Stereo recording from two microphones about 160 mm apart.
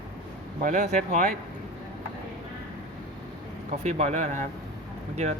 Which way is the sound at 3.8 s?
45° right (ahead or behind).